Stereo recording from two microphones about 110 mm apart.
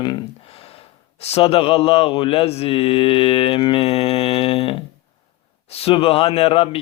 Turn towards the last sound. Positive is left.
turn(degrees=60)  # may be behind; listen again after turning